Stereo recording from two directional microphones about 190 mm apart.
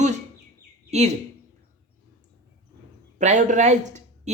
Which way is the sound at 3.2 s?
40° right (ahead or behind).